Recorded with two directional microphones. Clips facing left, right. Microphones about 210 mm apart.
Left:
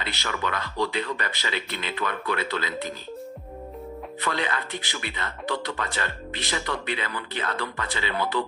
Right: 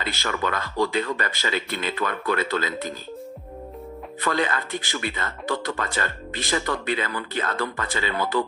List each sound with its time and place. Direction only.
0.0 s speech: 45° right (ahead or behind)
4.2 s speech: 45° right (ahead or behind)